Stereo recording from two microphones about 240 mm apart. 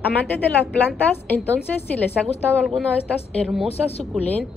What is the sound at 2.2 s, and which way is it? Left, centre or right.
Speech, centre.